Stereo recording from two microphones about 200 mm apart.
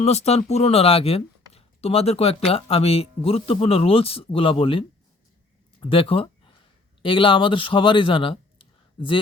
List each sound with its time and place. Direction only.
0.0 s speech: 30° left (ahead or behind)